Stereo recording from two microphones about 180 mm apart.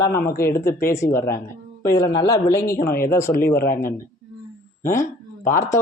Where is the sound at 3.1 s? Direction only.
15° left (ahead or behind).